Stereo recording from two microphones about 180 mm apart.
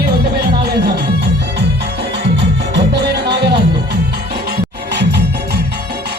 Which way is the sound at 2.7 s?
70° right (ahead or behind).